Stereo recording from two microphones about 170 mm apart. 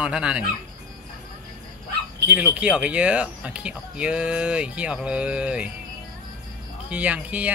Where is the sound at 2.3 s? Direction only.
10° right (ahead or behind).